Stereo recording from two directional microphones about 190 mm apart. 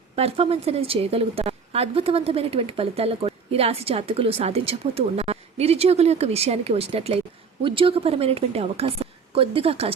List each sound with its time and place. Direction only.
0.2 s a woman's voice: 30° right (ahead or behind)